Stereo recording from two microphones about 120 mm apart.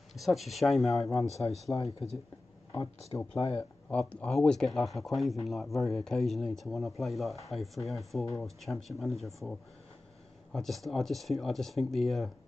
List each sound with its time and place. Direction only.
0.1 s speech: centre (ahead or behind)
1.2 s speech: 65° left (ahead or behind)
1.7 s speech: 30° left (ahead or behind)
3.9 s speech: 10° left (ahead or behind)